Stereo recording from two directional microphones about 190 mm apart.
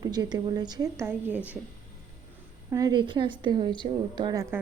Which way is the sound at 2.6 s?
20° right (ahead or behind).